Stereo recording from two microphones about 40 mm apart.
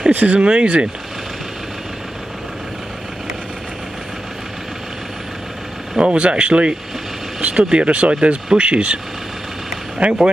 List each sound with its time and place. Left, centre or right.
0.3 s speech: right
5.9 s speech: right